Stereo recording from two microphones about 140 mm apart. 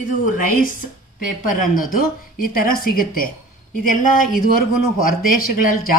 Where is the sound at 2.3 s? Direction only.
90° left.